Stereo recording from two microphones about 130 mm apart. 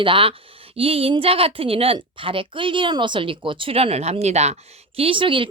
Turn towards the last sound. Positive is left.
turn(degrees=-40)  # may be behind; listen again after turning